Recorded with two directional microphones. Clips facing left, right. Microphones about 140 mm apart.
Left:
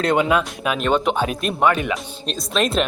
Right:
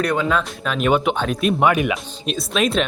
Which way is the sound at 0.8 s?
5° right (ahead or behind).